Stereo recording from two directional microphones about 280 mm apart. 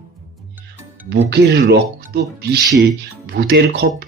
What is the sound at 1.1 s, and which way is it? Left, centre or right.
Speech, right.